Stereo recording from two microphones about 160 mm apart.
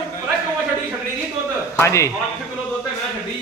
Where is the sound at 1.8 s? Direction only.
15° left (ahead or behind).